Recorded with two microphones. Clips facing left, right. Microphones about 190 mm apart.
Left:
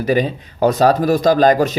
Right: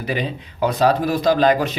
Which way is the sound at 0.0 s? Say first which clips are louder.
Left 7 dB; 45° left (ahead or behind).